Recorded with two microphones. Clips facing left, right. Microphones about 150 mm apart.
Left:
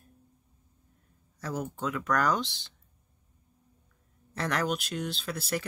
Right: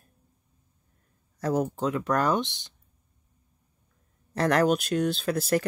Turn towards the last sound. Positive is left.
turn(degrees=-45)  # may be behind; listen again after turning